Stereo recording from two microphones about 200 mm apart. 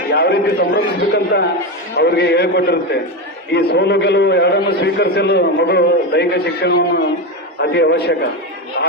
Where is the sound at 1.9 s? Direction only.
55° left (ahead or behind).